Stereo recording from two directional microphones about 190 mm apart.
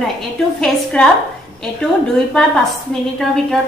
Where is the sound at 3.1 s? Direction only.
Centre (ahead or behind).